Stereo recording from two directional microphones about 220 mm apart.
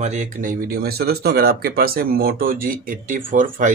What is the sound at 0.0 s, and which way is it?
Speech, 35° right (ahead or behind).